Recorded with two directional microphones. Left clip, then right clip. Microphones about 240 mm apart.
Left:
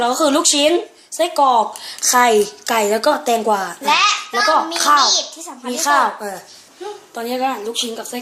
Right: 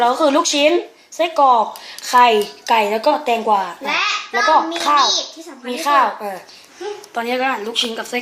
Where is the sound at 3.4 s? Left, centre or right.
Left.